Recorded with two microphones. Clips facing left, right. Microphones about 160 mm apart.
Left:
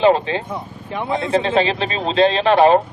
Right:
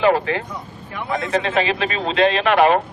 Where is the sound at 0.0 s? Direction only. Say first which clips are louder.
Left 2 dB; 25° left (ahead or behind).